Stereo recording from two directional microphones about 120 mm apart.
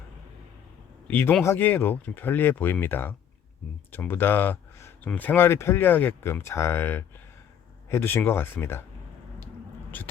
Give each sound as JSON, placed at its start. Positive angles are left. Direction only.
{"t": 1.1, "sound": "speech", "side_deg": 20}
{"t": 9.9, "sound": "speech", "side_deg": 15}